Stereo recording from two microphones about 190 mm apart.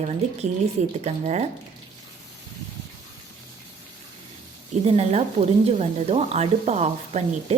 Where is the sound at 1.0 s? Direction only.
35° right (ahead or behind).